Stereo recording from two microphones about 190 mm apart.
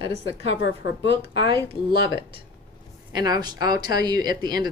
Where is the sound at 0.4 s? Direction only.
65° left (ahead or behind).